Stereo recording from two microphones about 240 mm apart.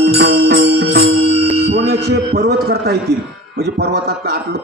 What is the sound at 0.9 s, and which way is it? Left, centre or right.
Music, right.